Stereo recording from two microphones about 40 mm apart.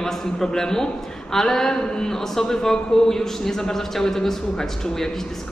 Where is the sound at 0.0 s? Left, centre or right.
Centre.